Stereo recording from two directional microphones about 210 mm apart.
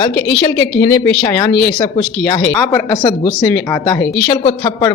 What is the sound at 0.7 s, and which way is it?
Speech, 10° left (ahead or behind).